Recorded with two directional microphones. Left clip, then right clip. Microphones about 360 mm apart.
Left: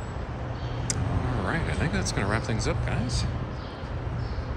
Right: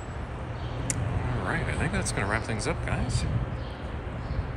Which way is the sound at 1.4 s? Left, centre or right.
Centre.